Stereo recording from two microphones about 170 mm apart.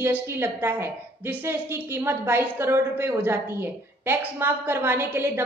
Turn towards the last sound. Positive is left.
turn(degrees=-15)  # may be behind; listen again after turning